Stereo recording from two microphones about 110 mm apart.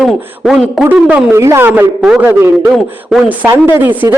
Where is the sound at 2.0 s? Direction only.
5° right (ahead or behind).